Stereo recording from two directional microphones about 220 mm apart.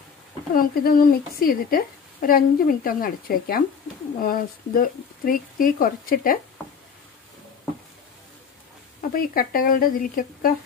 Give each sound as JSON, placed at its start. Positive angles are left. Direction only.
{"t": 0.6, "sound": "a woman's voice", "side_deg": 40}
{"t": 9.1, "sound": "a woman's voice", "side_deg": 40}